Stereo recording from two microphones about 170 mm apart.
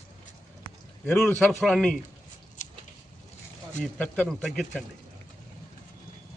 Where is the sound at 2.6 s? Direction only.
45° left (ahead or behind).